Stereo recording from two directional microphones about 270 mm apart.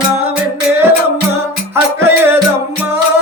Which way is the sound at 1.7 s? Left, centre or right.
Centre.